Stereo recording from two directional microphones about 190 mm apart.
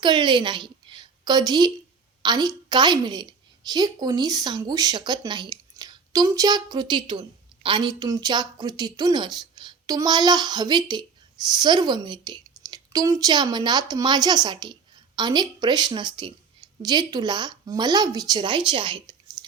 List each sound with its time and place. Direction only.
0.0 s a woman's voice: 25° right (ahead or behind)